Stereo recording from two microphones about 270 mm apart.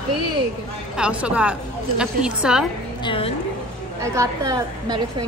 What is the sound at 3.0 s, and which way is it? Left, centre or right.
Speech, centre.